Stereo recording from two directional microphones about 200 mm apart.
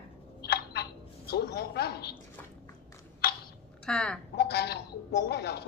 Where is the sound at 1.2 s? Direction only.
55° left (ahead or behind).